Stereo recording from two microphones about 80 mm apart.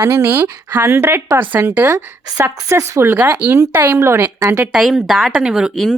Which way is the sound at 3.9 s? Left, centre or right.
Right.